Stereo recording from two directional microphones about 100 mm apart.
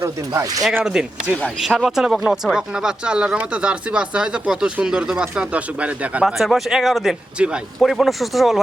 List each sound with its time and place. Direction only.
0.0 s speech: 35° right (ahead or behind)
0.9 s speech: 5° right (ahead or behind)
6.2 s a man's voice: 5° right (ahead or behind)